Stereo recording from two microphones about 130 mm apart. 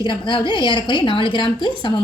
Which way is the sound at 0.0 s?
40° left (ahead or behind).